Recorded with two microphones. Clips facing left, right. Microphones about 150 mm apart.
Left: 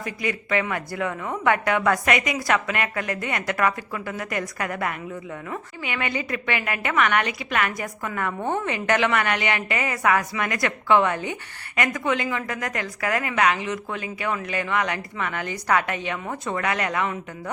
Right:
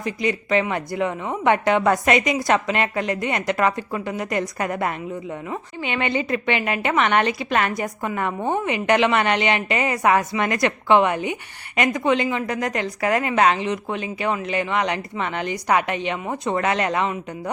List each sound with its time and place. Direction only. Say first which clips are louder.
0.0 s a woman's voice: right 5 dB; 25° right (ahead or behind)